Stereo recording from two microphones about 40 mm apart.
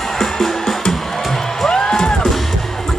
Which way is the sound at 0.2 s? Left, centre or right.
Centre.